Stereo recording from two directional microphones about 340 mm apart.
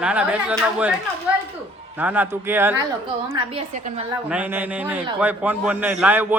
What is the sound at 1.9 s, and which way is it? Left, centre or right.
Speech, centre.